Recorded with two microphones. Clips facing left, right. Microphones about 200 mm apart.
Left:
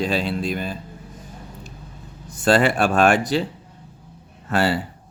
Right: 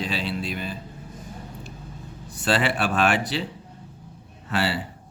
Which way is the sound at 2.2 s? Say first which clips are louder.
Left 6 dB; 45° left (ahead or behind).